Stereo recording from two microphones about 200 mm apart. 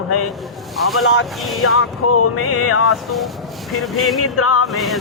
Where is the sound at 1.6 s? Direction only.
90° left.